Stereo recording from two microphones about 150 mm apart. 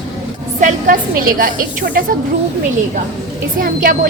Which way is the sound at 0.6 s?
65° right (ahead or behind).